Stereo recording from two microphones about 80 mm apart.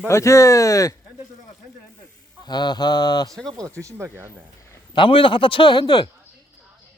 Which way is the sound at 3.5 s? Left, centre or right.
Right.